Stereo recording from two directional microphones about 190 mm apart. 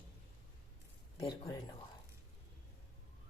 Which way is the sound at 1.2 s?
20° left (ahead or behind).